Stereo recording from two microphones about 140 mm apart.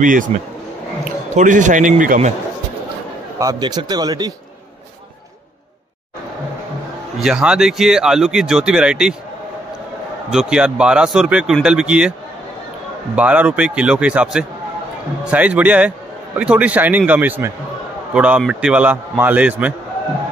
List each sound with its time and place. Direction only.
0.3 s speech: 45° right (ahead or behind)
1.3 s a man's voice: 65° right (ahead or behind)
3.3 s speech: 25° right (ahead or behind)
7.2 s speech: 5° right (ahead or behind)
10.3 s speech: 5° right (ahead or behind)
13.1 s a man's voice: 10° right (ahead or behind)